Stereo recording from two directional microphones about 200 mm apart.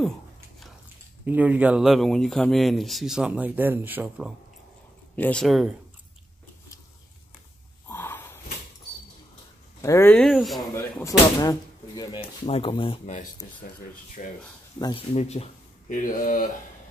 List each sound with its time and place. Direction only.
1.2 s speech: 10° right (ahead or behind)
5.1 s speech: 5° left (ahead or behind)
7.9 s snort: 10° left (ahead or behind)
9.8 s speech: 15° left (ahead or behind)
10.7 s speech: 15° left (ahead or behind); by 14.3 s 40° left (ahead or behind)
14.8 s speech: 20° left (ahead or behind)
15.1 s speech: 30° left (ahead or behind)